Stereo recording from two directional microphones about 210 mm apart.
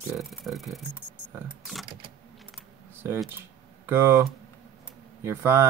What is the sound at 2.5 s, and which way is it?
Camera, 10° right (ahead or behind).